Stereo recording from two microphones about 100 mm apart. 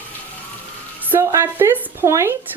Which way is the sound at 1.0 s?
20° right (ahead or behind).